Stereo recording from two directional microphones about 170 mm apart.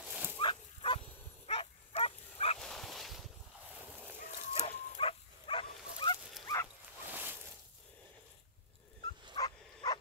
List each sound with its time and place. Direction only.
0.0 s dog: 10° right (ahead or behind)
0.4 s dog: 30° left (ahead or behind)
2.6 s dog: 5° left (ahead or behind)
4.2 s dog: 40° left (ahead or behind)
6.4 s dog: 15° left (ahead or behind)
7.1 s a sound: 10° right (ahead or behind)
9.3 s bow-wow: 25° left (ahead or behind)